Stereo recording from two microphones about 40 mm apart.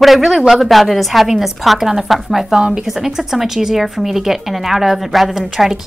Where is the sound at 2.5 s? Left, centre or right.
Centre.